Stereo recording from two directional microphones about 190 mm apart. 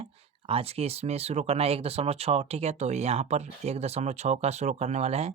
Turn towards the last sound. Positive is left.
turn(degrees=-35)  # may be behind; listen again after turning